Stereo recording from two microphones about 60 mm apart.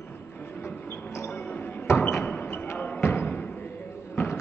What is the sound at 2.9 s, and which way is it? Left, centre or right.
Music, left.